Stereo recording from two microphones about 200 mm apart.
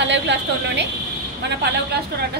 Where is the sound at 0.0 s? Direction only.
60° right (ahead or behind).